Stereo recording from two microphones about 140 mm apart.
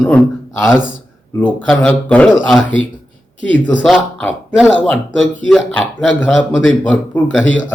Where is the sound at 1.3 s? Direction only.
10° left (ahead or behind).